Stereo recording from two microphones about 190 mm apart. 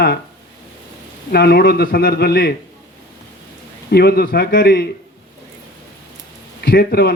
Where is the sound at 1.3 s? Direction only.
55° left (ahead or behind).